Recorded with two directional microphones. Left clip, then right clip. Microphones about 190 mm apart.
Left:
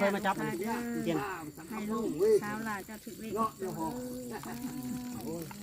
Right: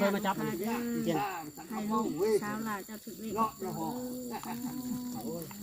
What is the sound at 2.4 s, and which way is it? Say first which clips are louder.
Speech: even; 20° left (ahead or behind).